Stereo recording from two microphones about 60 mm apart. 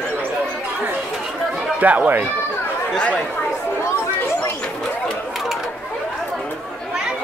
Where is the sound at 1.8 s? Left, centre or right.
Right.